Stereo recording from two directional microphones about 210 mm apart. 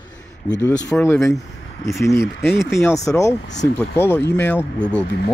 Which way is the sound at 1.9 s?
15° left (ahead or behind).